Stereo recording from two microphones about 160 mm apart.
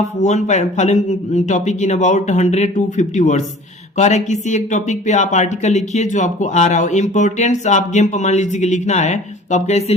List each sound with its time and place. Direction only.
0.0 s speech: 45° left (ahead or behind)